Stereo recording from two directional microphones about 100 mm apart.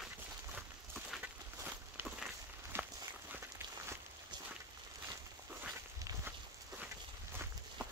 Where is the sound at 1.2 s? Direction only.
20° right (ahead or behind).